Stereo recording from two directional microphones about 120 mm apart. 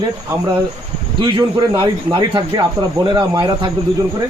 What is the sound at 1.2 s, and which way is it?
A man's voice, 40° right (ahead or behind).